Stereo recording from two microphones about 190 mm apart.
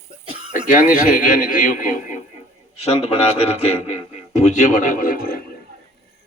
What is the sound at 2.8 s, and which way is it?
Speech, 35° left (ahead or behind).